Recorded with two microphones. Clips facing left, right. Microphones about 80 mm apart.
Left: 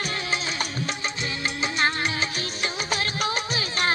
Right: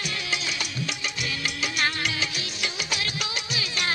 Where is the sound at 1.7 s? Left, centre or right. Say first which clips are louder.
Left 3 dB; left.